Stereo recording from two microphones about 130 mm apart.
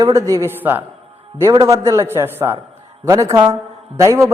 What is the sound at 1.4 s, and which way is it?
A man's voice, 25° right (ahead or behind).